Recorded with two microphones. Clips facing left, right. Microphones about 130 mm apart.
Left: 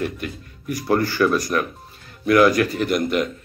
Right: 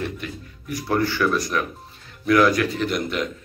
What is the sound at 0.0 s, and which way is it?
Speech, 55° left (ahead or behind).